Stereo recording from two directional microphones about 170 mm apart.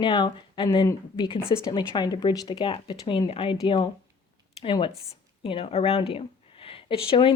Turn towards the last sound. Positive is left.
turn(degrees=30)  # may be behind; listen again after turning